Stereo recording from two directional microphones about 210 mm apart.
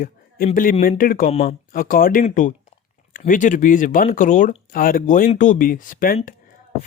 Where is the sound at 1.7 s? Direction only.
45° left (ahead or behind).